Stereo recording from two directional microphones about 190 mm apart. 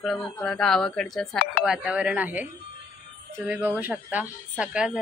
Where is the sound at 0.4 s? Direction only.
5° left (ahead or behind).